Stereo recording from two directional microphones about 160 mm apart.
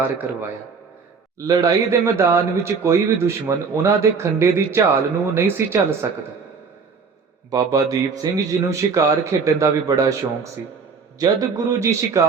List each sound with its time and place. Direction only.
0.0 s a man's voice: 10° right (ahead or behind)
1.5 s a man's voice: 20° right (ahead or behind)
7.5 s a man's voice: 25° right (ahead or behind)